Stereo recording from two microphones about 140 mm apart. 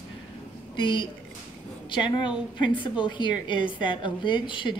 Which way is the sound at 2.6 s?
35° left (ahead or behind).